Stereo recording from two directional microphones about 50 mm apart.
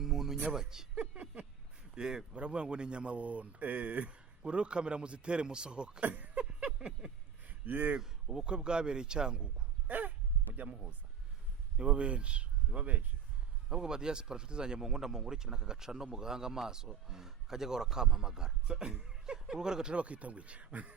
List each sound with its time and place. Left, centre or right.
0.0 s a sound: centre
0.5 s speech: centre
0.9 s a sound: right
2.0 s speech: centre; by 4.2 s right
4.4 s speech: centre
6.0 s speech: right
6.4 s a sound: right
7.4 s a sound: right
7.9 s speech: centre
9.8 s dog: right
10.6 s speech: right
11.8 s speech: right
13.7 s speech: centre